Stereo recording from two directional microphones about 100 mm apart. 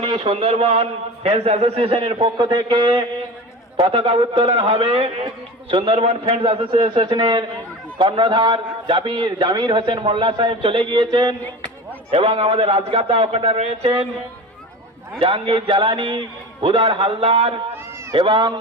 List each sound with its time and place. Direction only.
0.0 s a man's voice: 70° right (ahead or behind)
2.2 s a man's voice: 50° right (ahead or behind)
3.8 s a man's voice: 65° right (ahead or behind); by 5.1 s 80° right
5.7 s a man's voice: 70° right (ahead or behind); by 11.3 s 50° right (ahead or behind)
12.1 s a man's voice: 75° right (ahead or behind); by 14.1 s 90° right
15.2 s a man's voice: 65° right (ahead or behind)
18.1 s a man's voice: 55° right (ahead or behind)